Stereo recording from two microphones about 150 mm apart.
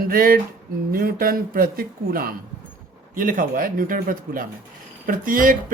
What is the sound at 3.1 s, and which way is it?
Speech, 65° right (ahead or behind).